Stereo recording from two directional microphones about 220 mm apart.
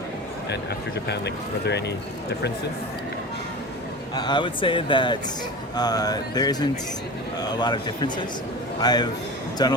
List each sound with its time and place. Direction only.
0.5 s speech: 50° left (ahead or behind)
4.1 s speech: 20° left (ahead or behind)